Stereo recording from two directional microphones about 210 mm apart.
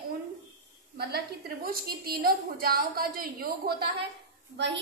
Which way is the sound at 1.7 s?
45° right (ahead or behind).